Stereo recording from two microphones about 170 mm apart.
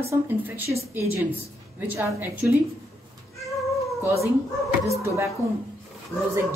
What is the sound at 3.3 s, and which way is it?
Cat, centre (ahead or behind).